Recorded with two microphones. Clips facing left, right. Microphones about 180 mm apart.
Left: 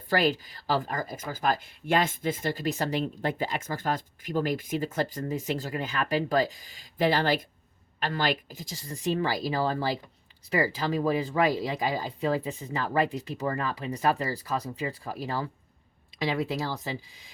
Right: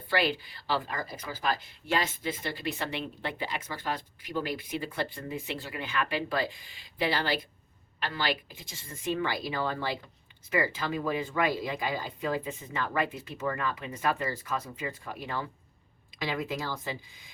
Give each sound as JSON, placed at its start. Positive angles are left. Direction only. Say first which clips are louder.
{"t": 0.1, "sound": "speech", "louder": "left 3 dB", "side_deg": 40}